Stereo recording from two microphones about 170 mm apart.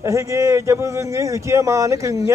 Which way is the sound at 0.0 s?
15° right (ahead or behind).